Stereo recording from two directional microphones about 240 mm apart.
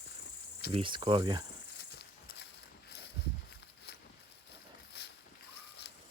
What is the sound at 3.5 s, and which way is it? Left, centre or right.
Walk, left.